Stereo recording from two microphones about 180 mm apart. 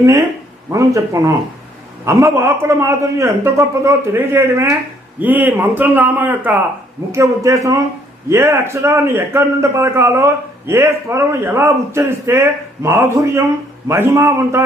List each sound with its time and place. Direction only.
0.7 s a man's voice: 15° right (ahead or behind)